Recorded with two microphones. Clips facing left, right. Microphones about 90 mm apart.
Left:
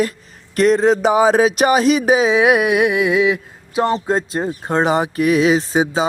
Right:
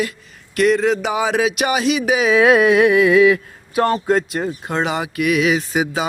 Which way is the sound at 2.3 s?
15° left (ahead or behind).